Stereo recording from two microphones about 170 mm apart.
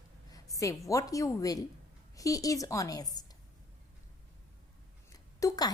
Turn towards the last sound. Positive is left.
turn(degrees=20)  # may be behind; listen again after turning